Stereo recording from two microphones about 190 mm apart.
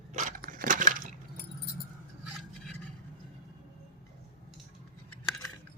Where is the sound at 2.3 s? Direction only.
Centre (ahead or behind).